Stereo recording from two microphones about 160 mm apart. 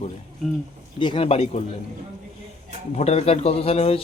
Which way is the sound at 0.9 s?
30° left (ahead or behind).